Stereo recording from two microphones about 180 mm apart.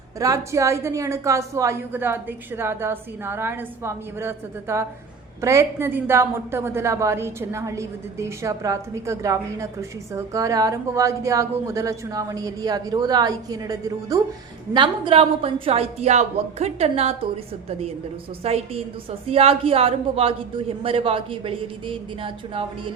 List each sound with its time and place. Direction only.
0.2 s a woman's voice: 15° right (ahead or behind)